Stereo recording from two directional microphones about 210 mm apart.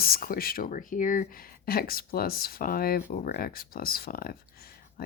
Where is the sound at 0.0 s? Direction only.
45° left (ahead or behind).